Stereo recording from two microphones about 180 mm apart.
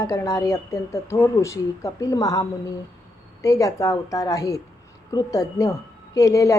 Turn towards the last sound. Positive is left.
turn(degrees=15)  # may be behind; listen again after turning